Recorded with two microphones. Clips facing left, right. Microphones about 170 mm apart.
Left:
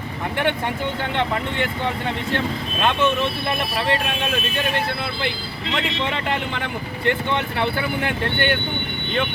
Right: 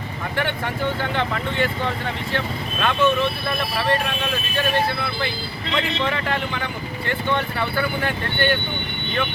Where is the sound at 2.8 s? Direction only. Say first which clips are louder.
Even; 20° left (ahead or behind).